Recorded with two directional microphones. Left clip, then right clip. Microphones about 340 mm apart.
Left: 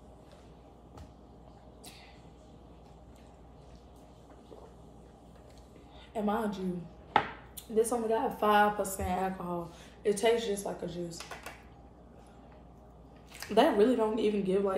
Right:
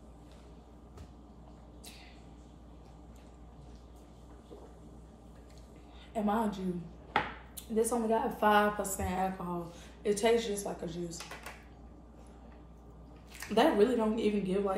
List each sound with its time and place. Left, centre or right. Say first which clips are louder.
6.1 s a woman's voice: even; centre
7.7 s a woman's voice: left 1 dB; centre
13.6 s speech: left 2 dB; centre